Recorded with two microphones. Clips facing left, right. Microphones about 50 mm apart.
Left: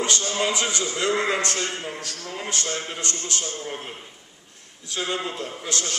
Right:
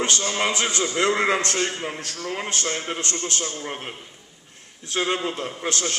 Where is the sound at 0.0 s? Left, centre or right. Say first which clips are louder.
Right 1 dB; right.